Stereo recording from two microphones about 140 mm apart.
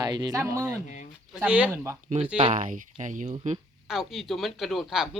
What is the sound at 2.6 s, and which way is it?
Speech, 65° right (ahead or behind).